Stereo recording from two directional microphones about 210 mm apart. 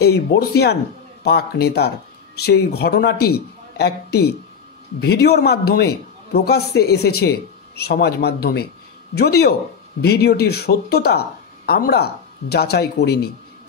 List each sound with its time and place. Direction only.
0.0 s a man's voice: 50° left (ahead or behind)